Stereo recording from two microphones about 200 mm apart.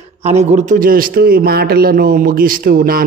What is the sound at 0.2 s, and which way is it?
A man's voice, 35° right (ahead or behind).